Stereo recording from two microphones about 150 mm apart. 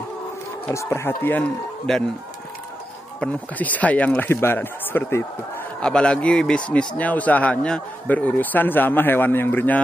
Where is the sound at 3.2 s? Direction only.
10° left (ahead or behind).